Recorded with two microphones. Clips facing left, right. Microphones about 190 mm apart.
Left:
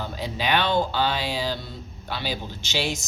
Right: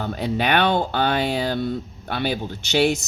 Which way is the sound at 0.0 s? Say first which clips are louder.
Right 5 dB; 60° right (ahead or behind).